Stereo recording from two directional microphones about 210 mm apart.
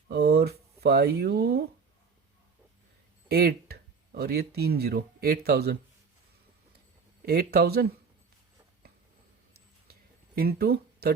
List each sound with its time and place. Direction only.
0.1 s speech: 50° right (ahead or behind)
3.2 s speech: 45° right (ahead or behind)
7.3 s speech: 45° right (ahead or behind)
10.3 s speech: 45° right (ahead or behind)